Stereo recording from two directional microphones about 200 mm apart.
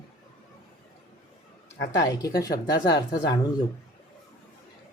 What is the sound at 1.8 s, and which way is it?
Speech, 15° left (ahead or behind).